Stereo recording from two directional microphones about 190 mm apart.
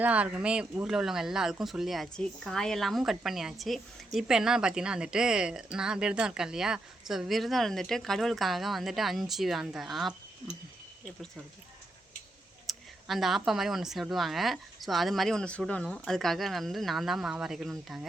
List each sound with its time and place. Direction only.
0.0 s speech: 5° right (ahead or behind)
12.6 s speech: centre (ahead or behind)